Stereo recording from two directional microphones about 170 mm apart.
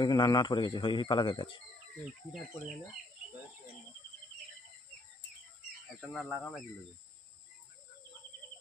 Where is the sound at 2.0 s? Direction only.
Centre (ahead or behind).